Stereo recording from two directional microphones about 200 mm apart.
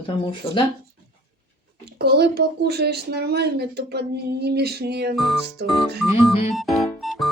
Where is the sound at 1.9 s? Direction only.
55° right (ahead or behind).